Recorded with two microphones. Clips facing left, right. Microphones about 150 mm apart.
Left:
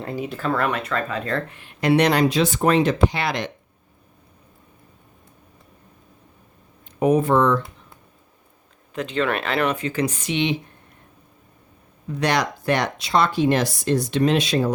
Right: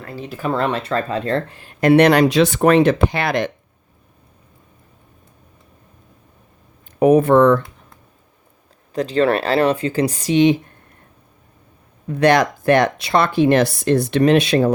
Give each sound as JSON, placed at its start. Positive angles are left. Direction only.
{"t": 0.5, "sound": "speech", "side_deg": -30}
{"t": 1.8, "sound": "speech", "side_deg": -55}
{"t": 7.0, "sound": "speech", "side_deg": -60}
{"t": 8.9, "sound": "speech", "side_deg": -35}
{"t": 12.0, "sound": "speech", "side_deg": -55}